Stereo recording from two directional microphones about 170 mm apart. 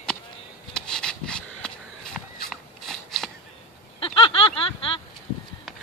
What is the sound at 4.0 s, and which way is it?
Snicker, 30° left (ahead or behind).